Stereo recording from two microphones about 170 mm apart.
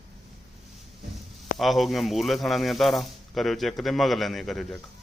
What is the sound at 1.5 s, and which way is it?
Speech, centre (ahead or behind).